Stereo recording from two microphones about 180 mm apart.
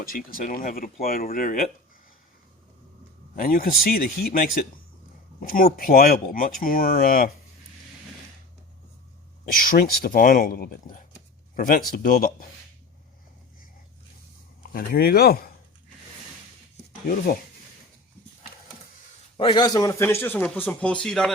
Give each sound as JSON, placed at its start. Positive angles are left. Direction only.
{"t": 0.1, "sound": "speech", "side_deg": 50}
{"t": 3.3, "sound": "speech", "side_deg": 50}
{"t": 9.5, "sound": "speech", "side_deg": 50}
{"t": 14.6, "sound": "speech", "side_deg": 55}
{"t": 19.4, "sound": "a man's voice", "side_deg": 25}